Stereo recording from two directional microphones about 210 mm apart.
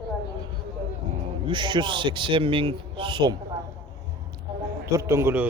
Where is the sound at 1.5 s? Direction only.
20° right (ahead or behind).